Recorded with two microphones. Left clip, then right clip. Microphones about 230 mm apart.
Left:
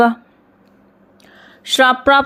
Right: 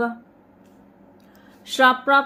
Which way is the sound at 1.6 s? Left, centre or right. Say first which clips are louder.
Left 5 dB; left.